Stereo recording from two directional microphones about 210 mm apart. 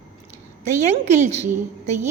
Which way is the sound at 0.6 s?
35° right (ahead or behind).